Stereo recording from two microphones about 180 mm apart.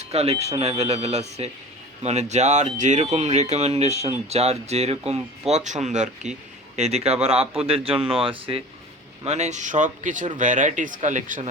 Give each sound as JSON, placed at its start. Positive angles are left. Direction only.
{"t": 0.0, "sound": "speech", "side_deg": -35}